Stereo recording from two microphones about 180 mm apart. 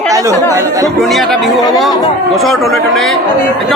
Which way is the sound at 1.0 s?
Centre (ahead or behind).